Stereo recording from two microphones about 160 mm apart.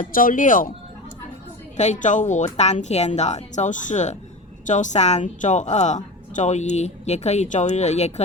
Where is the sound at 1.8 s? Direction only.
50° left (ahead or behind).